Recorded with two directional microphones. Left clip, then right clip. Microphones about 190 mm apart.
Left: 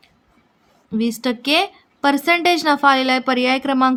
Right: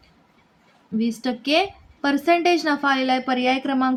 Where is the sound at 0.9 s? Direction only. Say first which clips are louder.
Left 4 dB; 45° left (ahead or behind).